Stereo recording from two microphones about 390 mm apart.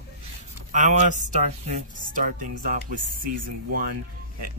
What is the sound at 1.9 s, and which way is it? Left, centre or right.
Music, right.